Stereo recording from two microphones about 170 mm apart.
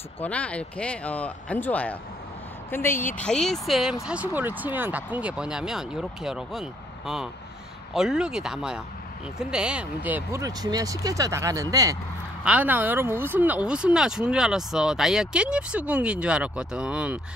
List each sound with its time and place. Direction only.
0.2 s speech: 10° left (ahead or behind); by 12.0 s 20° right (ahead or behind)
12.4 s speech: 10° right (ahead or behind)